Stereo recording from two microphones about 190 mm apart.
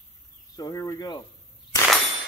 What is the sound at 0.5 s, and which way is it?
Speech, 20° left (ahead or behind).